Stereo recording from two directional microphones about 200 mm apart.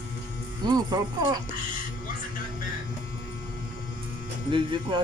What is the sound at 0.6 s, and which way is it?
Speech, 20° right (ahead or behind).